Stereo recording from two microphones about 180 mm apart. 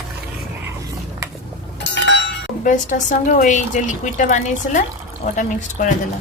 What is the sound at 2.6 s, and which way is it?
A woman's voice, 45° left (ahead or behind).